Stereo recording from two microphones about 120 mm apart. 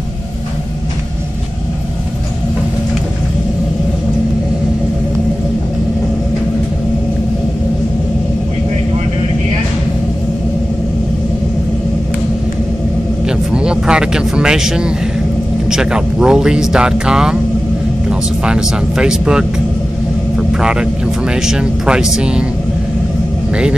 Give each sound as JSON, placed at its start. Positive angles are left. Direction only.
{"t": 13.5, "sound": "a sound", "side_deg": -10}
{"t": 15.7, "sound": "speech", "side_deg": -5}
{"t": 18.4, "sound": "speech", "side_deg": -5}
{"t": 23.5, "sound": "speech", "side_deg": -10}